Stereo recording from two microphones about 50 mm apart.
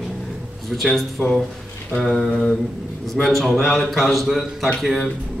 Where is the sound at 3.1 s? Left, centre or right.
Centre.